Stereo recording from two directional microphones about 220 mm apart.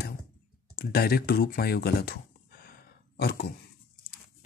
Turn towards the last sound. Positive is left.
turn(degrees=45)  # may be behind; listen again after turning